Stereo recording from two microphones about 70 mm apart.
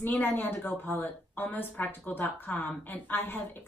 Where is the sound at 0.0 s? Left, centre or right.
Left.